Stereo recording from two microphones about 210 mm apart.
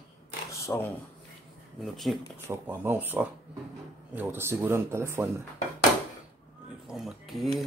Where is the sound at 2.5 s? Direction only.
10° right (ahead or behind).